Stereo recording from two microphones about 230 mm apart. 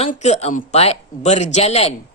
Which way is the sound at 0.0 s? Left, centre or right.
Left.